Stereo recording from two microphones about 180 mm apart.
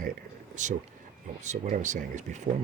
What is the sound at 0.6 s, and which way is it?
Speech, 40° right (ahead or behind).